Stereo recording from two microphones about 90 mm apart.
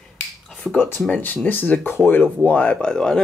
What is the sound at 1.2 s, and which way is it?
Speech, 20° left (ahead or behind).